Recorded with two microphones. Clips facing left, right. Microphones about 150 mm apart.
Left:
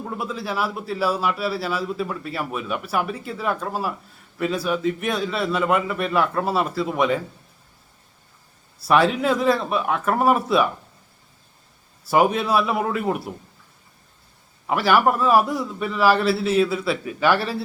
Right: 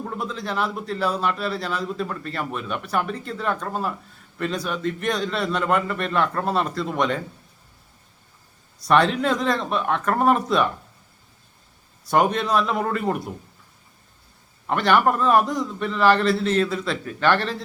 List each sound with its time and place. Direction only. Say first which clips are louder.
0.0 s a man's voice: left 1 dB; 5° left (ahead or behind)
8.8 s a man's voice: left 1 dB; 5° left (ahead or behind)
12.0 s a man's voice: left 1 dB; 5° left (ahead or behind)
14.7 s a man's voice: left 1 dB; 5° left (ahead or behind)